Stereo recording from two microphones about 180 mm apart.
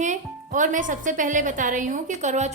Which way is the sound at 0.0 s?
45° right (ahead or behind).